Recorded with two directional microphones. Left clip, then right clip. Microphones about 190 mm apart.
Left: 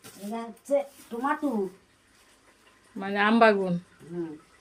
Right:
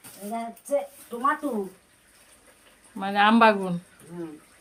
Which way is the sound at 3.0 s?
5° right (ahead or behind).